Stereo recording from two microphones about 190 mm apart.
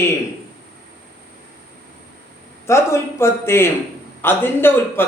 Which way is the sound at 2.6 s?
15° left (ahead or behind).